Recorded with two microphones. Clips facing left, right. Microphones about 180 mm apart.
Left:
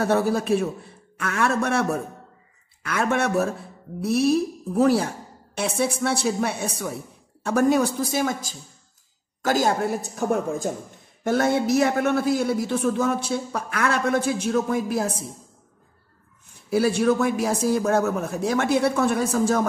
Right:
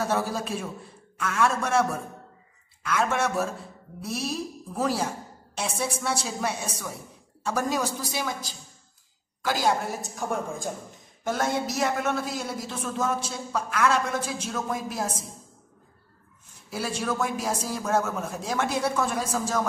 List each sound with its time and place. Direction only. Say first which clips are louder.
0.0 s a man's voice: left 6 dB; 60° left (ahead or behind)
16.7 s a man's voice: left 9 dB; 60° left (ahead or behind)